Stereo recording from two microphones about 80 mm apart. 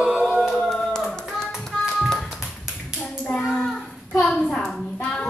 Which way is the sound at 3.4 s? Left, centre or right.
Centre.